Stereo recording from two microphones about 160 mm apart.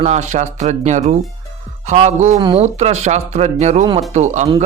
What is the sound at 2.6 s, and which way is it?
Speech, 45° right (ahead or behind).